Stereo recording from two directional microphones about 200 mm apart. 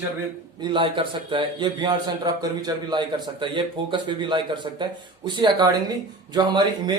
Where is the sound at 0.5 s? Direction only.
25° right (ahead or behind).